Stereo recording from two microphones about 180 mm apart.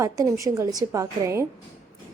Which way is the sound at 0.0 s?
20° right (ahead or behind).